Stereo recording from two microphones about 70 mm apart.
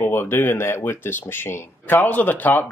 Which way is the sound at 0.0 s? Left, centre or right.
Left.